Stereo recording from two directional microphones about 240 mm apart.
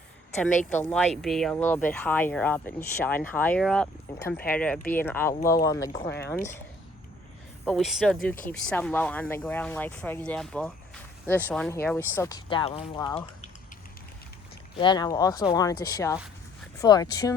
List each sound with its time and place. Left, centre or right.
0.6 s speech: centre
7.6 s speech: centre; by 13.5 s left
14.8 s speech: centre